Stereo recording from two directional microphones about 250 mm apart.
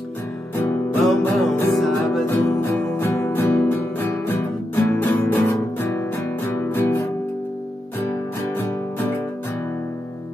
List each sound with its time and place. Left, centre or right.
1.0 s music: centre
8.5 s music: centre